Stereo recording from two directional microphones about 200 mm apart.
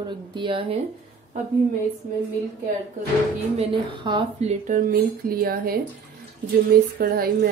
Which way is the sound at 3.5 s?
25° right (ahead or behind).